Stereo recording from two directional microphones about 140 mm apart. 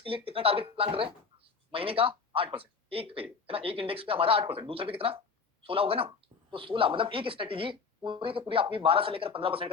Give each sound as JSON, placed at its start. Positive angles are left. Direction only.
{"t": 0.0, "sound": "speech", "side_deg": -40}